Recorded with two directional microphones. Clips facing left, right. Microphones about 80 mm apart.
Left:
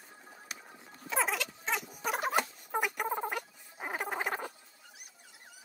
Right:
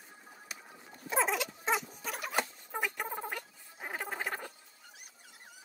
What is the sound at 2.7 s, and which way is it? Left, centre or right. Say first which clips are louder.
Frog: left 4 dB; left.